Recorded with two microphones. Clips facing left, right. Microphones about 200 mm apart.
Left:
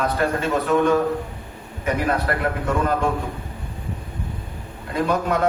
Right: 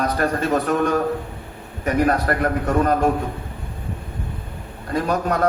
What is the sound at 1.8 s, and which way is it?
A man's voice, 45° right (ahead or behind).